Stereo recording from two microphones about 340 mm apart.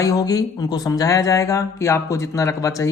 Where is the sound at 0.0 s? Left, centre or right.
Centre.